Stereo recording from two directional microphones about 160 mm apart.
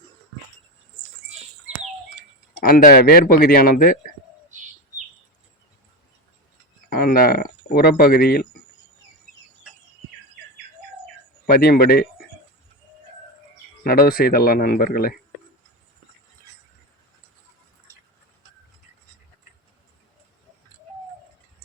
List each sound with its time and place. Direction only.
2.6 s speech: 60° left (ahead or behind)
6.9 s speech: 65° left (ahead or behind)
11.4 s a man's voice: 65° left (ahead or behind)
13.8 s speech: 65° left (ahead or behind)